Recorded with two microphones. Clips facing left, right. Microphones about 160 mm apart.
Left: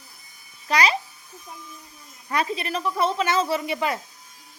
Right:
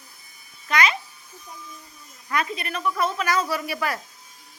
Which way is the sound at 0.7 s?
35° left (ahead or behind).